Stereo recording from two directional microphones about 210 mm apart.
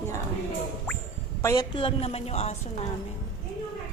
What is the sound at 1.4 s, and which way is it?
A woman's voice, 15° left (ahead or behind).